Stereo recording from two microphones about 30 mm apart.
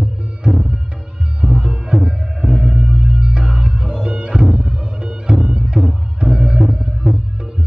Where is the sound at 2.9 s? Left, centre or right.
Right.